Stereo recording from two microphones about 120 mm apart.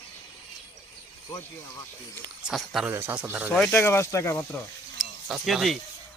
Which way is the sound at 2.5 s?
Centre (ahead or behind).